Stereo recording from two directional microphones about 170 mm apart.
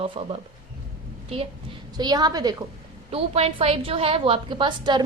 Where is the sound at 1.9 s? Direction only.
25° right (ahead or behind).